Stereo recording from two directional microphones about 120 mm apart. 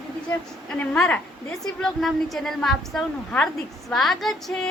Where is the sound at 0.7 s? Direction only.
5° left (ahead or behind).